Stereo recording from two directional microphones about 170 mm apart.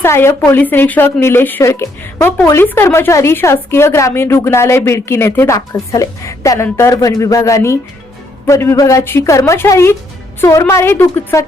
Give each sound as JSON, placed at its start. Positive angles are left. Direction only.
{"t": 0.0, "sound": "a woman's voice", "side_deg": 15}